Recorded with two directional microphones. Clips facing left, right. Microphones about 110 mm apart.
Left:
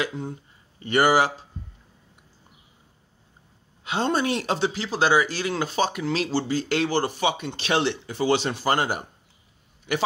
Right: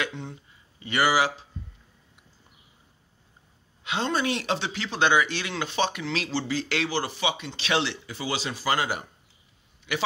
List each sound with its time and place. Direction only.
0.7 s speech: 45° left (ahead or behind)
3.8 s a man's voice: 40° left (ahead or behind)